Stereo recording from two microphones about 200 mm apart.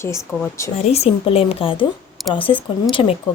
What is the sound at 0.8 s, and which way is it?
Speech, 30° left (ahead or behind).